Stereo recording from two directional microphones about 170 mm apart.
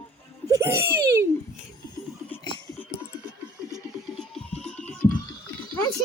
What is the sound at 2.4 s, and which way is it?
Laughter, 25° left (ahead or behind).